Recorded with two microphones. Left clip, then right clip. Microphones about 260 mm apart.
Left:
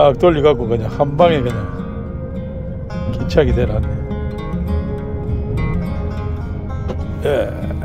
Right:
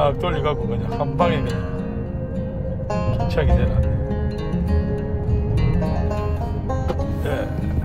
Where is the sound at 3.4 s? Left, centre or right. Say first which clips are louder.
Left 10 dB; left.